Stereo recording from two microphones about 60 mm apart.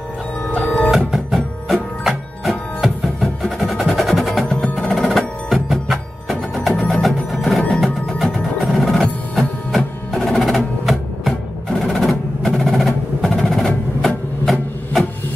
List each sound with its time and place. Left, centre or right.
0.8 s music: centre
4.7 s percussion: centre
6.8 s music: centre
11.8 s percussion: centre